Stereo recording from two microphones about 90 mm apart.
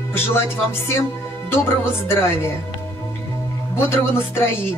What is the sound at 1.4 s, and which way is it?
Speech, 25° left (ahead or behind).